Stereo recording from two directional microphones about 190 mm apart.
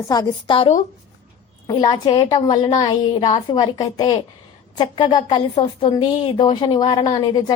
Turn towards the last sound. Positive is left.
turn(degrees=20)  # may be behind; listen again after turning